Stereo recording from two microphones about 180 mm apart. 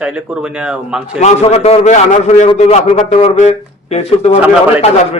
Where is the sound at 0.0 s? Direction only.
5° right (ahead or behind).